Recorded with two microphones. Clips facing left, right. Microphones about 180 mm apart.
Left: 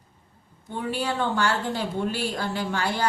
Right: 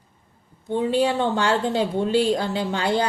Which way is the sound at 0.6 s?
20° right (ahead or behind).